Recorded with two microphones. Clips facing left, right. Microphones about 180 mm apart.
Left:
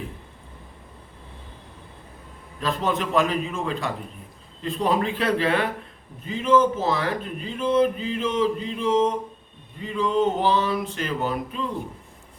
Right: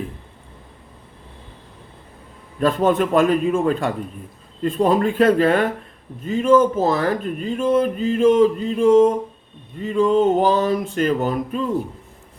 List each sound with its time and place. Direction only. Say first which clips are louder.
2.6 s speech: right 8 dB; 50° right (ahead or behind)